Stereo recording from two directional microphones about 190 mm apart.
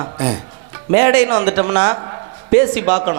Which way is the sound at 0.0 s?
25° right (ahead or behind).